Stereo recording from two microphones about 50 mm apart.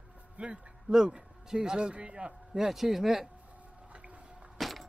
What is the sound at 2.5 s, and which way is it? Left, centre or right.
Speech, centre.